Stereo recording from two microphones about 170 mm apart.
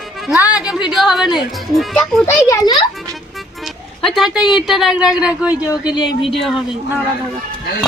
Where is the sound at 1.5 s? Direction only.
Centre (ahead or behind).